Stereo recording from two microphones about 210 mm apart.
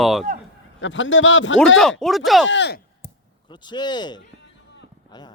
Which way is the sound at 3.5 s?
20° left (ahead or behind).